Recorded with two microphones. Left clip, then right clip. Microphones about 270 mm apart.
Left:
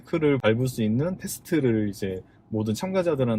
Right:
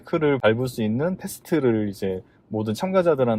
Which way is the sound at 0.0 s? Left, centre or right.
Right.